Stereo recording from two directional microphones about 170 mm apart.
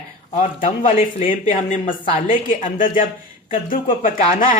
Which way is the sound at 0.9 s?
55° left (ahead or behind).